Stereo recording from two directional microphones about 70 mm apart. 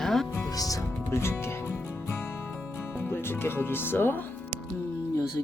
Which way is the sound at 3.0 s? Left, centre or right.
Left.